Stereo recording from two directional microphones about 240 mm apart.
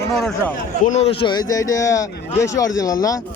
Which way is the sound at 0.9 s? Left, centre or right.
Left.